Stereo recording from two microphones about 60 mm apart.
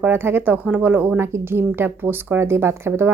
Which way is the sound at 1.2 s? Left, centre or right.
Right.